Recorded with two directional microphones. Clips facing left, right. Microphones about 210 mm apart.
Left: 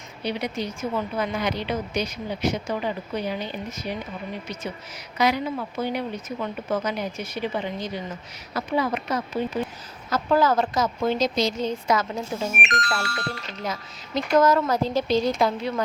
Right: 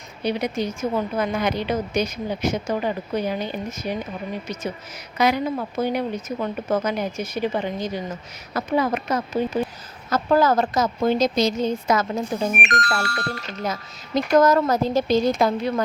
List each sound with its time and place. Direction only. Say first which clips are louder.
0.3 s a woman's voice: right 4 dB; 45° right (ahead or behind)
5.1 s a woman's voice: right 2 dB; 50° right (ahead or behind)
12.2 s speech: right 4 dB; 15° right (ahead or behind)
12.6 s a woman's voice: right 3 dB; 45° right (ahead or behind)